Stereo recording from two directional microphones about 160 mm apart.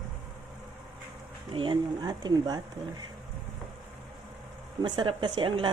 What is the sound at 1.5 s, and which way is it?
Speech, 30° right (ahead or behind).